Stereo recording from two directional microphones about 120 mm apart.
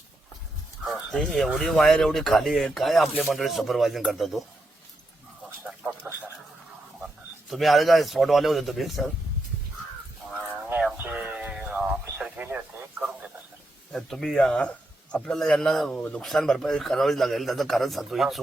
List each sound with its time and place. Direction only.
0.9 s speech: 5° left (ahead or behind)
6.0 s a sound: 20° right (ahead or behind)
7.5 s speech: centre (ahead or behind)
10.9 s a sound: 10° right (ahead or behind)
12.4 s speech: 15° right (ahead or behind)
13.9 s speech: centre (ahead or behind)